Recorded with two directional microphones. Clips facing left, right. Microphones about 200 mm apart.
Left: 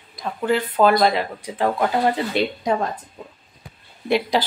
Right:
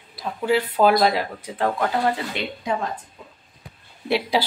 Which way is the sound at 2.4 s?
35° left (ahead or behind).